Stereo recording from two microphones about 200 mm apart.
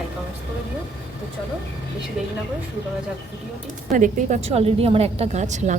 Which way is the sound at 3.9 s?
40° right (ahead or behind).